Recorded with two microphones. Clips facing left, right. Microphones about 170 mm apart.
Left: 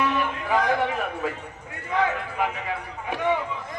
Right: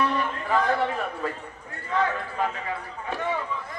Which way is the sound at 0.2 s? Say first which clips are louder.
Left 1 dB; 10° left (ahead or behind).